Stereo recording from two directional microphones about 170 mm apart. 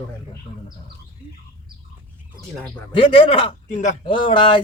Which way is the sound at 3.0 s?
30° left (ahead or behind).